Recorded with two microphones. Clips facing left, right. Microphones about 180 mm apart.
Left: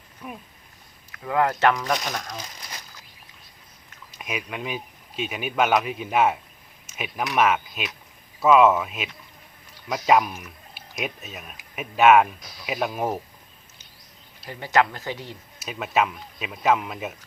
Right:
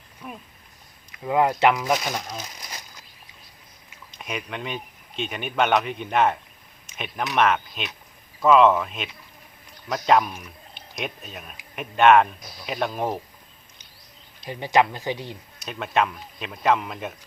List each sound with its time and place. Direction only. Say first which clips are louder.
0.2 s speech: left 1 dB; 10° left (ahead or behind)
1.1 s speech: right 2 dB; 15° right (ahead or behind)
4.1 s speech: even; 5° left (ahead or behind)
14.4 s speech: right 1 dB; 15° right (ahead or behind)
15.5 s speech: even; 5° left (ahead or behind)